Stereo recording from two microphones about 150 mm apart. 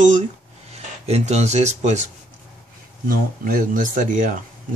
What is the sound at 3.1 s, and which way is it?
Speech, 70° right (ahead or behind).